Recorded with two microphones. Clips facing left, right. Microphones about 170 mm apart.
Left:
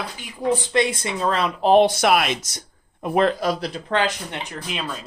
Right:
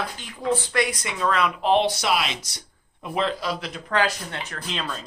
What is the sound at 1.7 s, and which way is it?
Speech, 50° left (ahead or behind).